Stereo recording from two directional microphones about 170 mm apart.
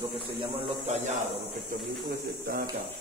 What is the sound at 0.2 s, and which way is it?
Speech, 35° right (ahead or behind).